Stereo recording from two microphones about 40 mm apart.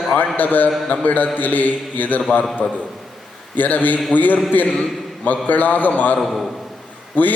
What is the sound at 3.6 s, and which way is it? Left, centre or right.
A man's voice, left.